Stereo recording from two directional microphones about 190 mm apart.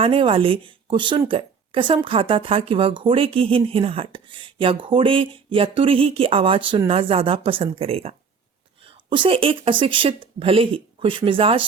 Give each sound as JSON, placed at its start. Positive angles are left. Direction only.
{"t": 0.0, "sound": "speech", "side_deg": -30}